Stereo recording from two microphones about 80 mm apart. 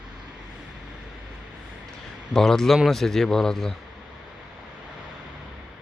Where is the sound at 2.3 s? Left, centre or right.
Centre.